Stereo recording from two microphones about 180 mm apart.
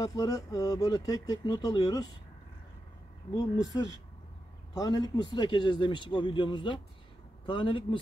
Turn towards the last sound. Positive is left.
turn(degrees=30)  # may be behind; listen again after turning